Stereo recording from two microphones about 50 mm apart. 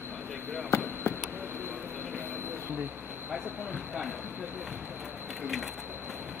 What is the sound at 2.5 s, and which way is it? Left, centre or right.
Vehicle, right.